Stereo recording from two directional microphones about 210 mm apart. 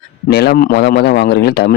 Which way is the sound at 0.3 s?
50° left (ahead or behind).